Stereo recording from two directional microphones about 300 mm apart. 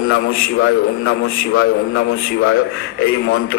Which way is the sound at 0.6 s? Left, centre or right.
Left.